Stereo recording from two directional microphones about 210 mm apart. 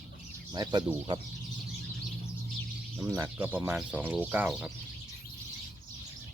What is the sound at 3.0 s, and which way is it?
Speech, 15° right (ahead or behind).